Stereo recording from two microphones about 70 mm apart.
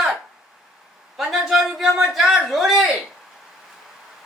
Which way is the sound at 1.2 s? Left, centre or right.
Centre.